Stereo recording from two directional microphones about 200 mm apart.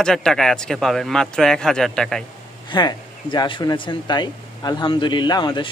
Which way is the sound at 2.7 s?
25° left (ahead or behind).